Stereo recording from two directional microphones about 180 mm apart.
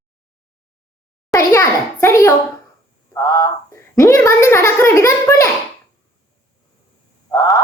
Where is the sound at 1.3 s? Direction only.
20° left (ahead or behind).